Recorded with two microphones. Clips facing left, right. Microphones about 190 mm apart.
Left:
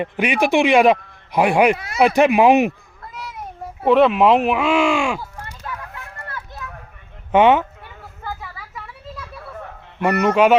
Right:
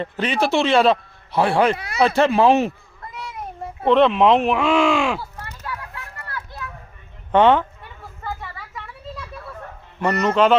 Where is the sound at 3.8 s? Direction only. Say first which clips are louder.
Left 1 dB; 5° left (ahead or behind).